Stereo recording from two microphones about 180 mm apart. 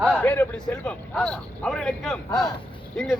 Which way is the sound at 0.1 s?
10° left (ahead or behind).